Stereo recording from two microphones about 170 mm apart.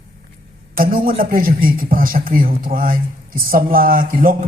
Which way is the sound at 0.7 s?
60° right (ahead or behind).